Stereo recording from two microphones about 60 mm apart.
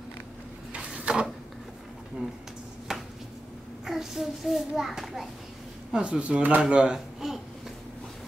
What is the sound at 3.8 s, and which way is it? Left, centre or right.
A child's voice, centre.